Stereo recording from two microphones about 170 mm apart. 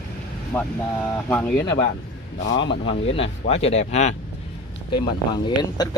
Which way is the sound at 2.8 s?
35° left (ahead or behind).